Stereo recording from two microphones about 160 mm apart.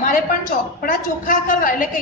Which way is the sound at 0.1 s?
55° left (ahead or behind).